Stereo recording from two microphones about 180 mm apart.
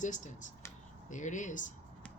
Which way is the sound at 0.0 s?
45° left (ahead or behind).